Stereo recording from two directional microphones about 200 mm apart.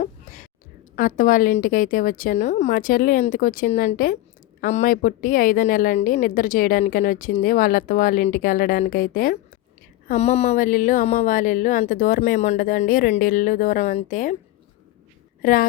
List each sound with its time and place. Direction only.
0.9 s a woman's voice: 40° left (ahead or behind)
10.1 s speech: 30° left (ahead or behind)
15.4 s speech: 45° left (ahead or behind)